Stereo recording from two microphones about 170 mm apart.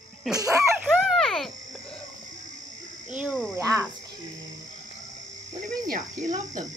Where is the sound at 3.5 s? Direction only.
15° right (ahead or behind).